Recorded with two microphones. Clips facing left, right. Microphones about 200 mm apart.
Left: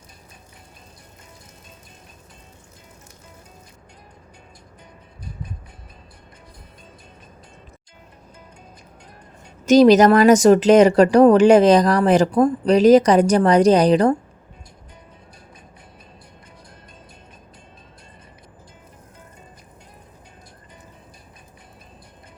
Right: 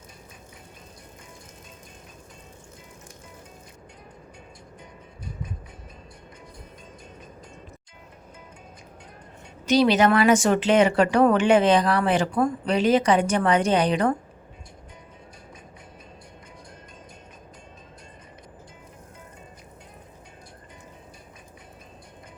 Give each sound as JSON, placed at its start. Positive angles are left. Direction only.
{"t": 9.6, "sound": "speech", "side_deg": 45}